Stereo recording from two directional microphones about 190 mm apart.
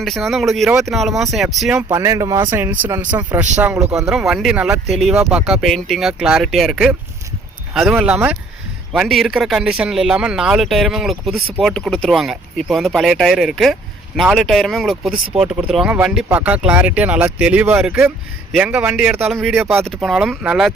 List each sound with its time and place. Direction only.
0.0 s speech: centre (ahead or behind)
1.9 s speech: 15° right (ahead or behind)
19.3 s speech: centre (ahead or behind)
19.5 s speech: 10° right (ahead or behind)
19.8 s speech: centre (ahead or behind)